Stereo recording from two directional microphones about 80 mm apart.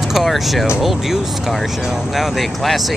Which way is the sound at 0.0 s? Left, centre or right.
Centre.